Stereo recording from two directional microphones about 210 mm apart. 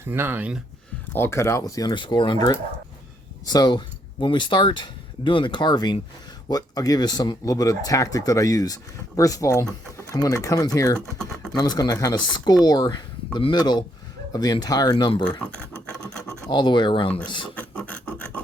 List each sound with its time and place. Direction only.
0.0 s speech: 10° right (ahead or behind)
1.1 s speech: 10° left (ahead or behind)
10.9 s speech: 5° left (ahead or behind)
11.5 s speech: 20° left (ahead or behind)
15.4 s a sound: 5° left (ahead or behind)
16.5 s speech: 20° left (ahead or behind)
17.5 s a sound: 5° left (ahead or behind)